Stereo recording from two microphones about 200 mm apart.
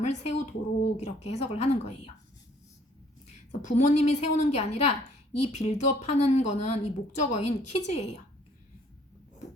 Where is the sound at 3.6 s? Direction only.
35° left (ahead or behind).